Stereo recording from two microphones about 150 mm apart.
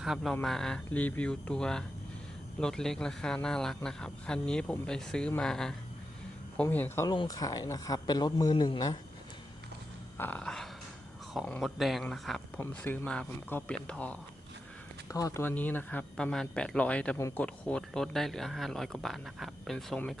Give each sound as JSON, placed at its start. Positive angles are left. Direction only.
{"t": 0.0, "sound": "speech", "side_deg": 0}
{"t": 7.1, "sound": "speech", "side_deg": 25}
{"t": 10.2, "sound": "speech", "side_deg": 10}
{"t": 12.5, "sound": "speech", "side_deg": 10}
{"t": 15.1, "sound": "speech", "side_deg": 20}
{"t": 17.2, "sound": "speech", "side_deg": 20}
{"t": 17.4, "sound": "speech", "side_deg": 5}